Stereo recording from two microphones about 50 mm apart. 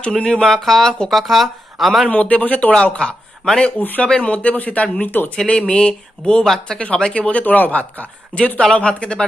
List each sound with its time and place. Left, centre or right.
0.0 s speech: centre
2.0 s speech: left
2.7 s speech: centre
3.7 s speech: left
4.0 s speech: left
6.4 s speech: centre
6.8 s speech: centre